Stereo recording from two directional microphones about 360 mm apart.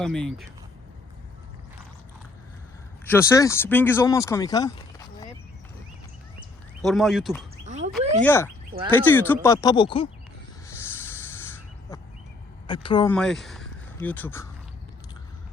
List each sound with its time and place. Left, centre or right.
0.0 s speech: centre
3.1 s speech: centre
6.8 s speech: centre
7.6 s a sound: centre
8.2 s speech: centre
10.7 s snake: centre
12.6 s speech: centre